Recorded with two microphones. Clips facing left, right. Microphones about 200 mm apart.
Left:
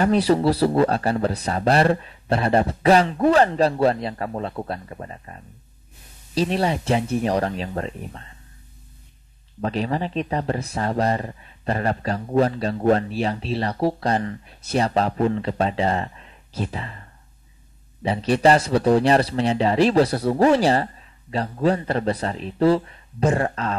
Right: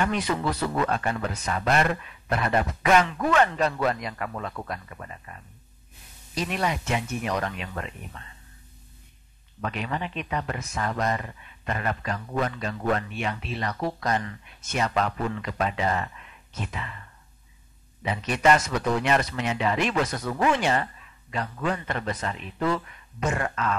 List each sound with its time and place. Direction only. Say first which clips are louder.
0.0 s speech: left 8 dB; 35° left (ahead or behind)
9.6 s speech: left 7 dB; 35° left (ahead or behind)